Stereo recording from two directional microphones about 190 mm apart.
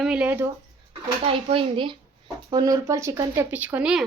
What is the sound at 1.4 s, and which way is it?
A woman's voice, 25° right (ahead or behind).